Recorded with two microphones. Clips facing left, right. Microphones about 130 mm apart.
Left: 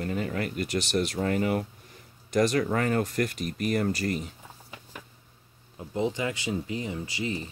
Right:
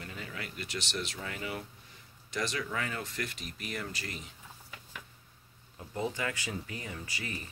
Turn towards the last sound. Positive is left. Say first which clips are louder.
# left 9 dB
turn(degrees=20)  # may be behind; listen again after turning